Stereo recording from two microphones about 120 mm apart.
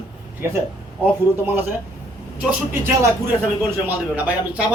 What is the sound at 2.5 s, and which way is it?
A man's voice, 20° right (ahead or behind).